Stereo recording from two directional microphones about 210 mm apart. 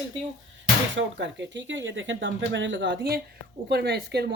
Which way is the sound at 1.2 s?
60° right (ahead or behind).